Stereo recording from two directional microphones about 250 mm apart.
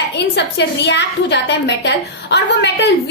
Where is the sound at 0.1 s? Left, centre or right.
Left.